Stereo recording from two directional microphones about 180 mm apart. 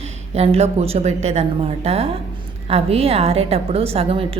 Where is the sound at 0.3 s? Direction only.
35° right (ahead or behind).